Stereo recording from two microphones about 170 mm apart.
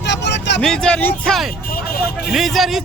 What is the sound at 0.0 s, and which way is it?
Vehicle, 90° left.